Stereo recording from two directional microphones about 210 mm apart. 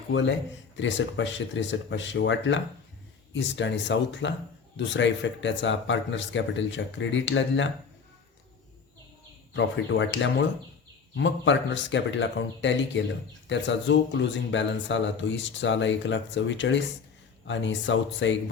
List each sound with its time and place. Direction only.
0.1 s speech: 60° left (ahead or behind)
9.5 s speech: 60° left (ahead or behind)